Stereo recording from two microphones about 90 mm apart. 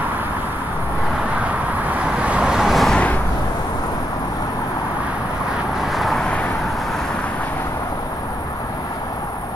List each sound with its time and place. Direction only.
2.2 s vehicle: 10° right (ahead or behind)
5.9 s vehicle: centre (ahead or behind)